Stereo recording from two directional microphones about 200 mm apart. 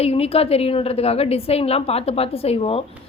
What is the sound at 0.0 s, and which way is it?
A woman's voice, 30° left (ahead or behind).